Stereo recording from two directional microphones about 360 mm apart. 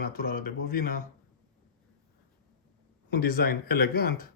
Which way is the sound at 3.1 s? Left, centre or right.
Left.